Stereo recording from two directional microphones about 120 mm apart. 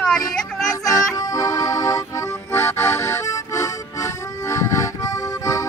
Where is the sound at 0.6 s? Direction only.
30° left (ahead or behind).